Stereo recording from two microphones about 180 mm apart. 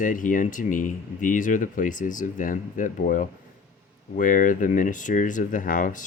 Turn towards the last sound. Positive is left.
turn(degrees=50)  # may be behind; listen again after turning